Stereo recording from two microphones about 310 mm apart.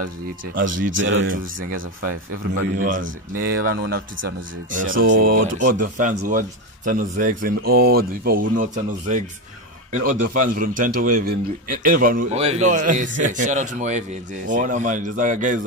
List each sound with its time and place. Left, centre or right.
0.7 s speech: right
2.7 s speech: right